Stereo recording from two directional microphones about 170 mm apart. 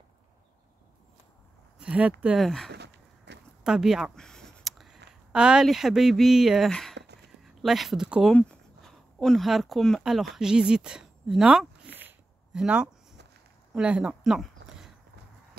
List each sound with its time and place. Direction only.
1.8 s speech: 5° right (ahead or behind)
2.7 s a sound: 80° right
3.6 s speech: 5° right (ahead or behind)